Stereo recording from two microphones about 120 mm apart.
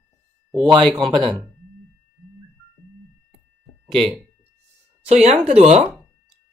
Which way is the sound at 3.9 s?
50° right (ahead or behind).